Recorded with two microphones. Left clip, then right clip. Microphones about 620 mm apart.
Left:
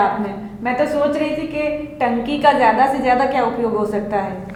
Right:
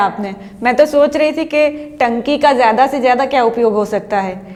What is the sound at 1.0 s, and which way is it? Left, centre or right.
A woman's voice, right.